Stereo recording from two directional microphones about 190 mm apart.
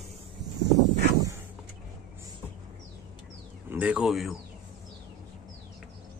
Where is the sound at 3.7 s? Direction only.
5° right (ahead or behind).